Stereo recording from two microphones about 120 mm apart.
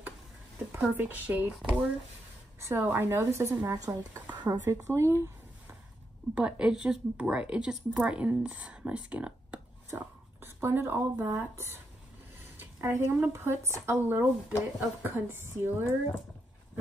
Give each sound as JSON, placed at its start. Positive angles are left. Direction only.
{"t": 0.7, "sound": "speech", "side_deg": -15}
{"t": 2.6, "sound": "speech", "side_deg": -20}
{"t": 6.3, "sound": "speech", "side_deg": -10}
{"t": 9.8, "sound": "a sound", "side_deg": -20}
{"t": 11.2, "sound": "speech", "side_deg": -25}